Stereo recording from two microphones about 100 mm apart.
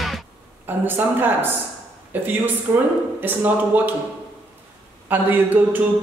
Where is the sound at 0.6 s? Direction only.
20° right (ahead or behind).